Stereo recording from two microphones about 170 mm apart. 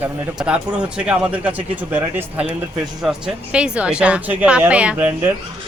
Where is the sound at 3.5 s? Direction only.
5° right (ahead or behind).